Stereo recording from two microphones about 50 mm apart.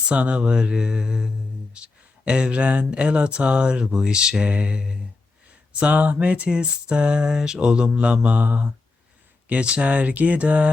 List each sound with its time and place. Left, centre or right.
0.1 s speech: right
5.8 s speech: right